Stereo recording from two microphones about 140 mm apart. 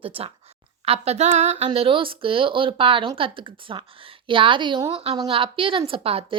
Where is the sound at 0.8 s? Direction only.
45° right (ahead or behind).